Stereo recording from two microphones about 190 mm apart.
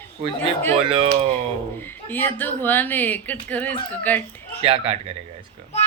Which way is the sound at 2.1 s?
10° left (ahead or behind).